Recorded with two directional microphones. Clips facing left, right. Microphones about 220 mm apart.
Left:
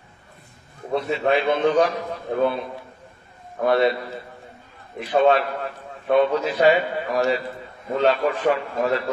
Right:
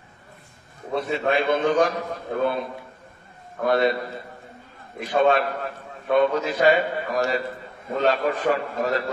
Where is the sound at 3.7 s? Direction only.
50° right (ahead or behind).